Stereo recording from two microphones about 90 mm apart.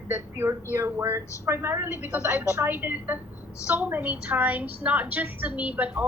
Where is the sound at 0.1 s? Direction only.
25° right (ahead or behind).